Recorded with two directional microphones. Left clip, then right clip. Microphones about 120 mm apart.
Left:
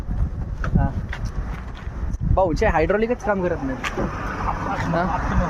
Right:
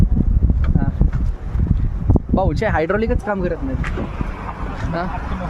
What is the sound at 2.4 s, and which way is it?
Speech, 40° right (ahead or behind).